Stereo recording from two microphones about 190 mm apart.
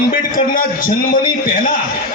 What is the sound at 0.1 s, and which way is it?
Speech, 45° left (ahead or behind).